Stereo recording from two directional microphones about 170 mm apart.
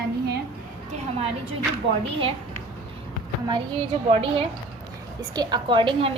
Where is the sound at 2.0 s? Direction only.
35° right (ahead or behind).